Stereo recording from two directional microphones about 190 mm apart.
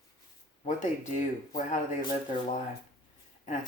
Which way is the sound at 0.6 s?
40° left (ahead or behind).